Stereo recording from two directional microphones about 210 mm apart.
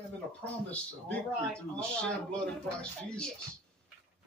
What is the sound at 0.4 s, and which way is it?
Speech, 5° left (ahead or behind).